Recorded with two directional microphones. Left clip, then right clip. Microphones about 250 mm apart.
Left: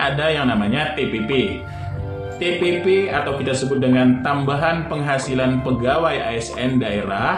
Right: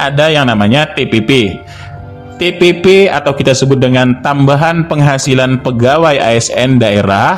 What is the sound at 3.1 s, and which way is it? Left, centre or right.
A man's voice, right.